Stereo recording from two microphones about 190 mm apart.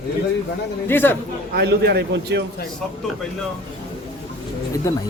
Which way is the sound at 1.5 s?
60° right (ahead or behind).